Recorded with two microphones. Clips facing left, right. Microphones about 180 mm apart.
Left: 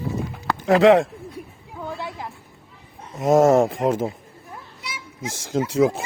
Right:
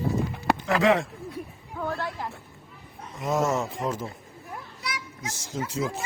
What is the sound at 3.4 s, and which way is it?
Speech, 50° left (ahead or behind).